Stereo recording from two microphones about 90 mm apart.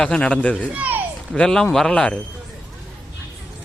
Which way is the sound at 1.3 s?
5° left (ahead or behind).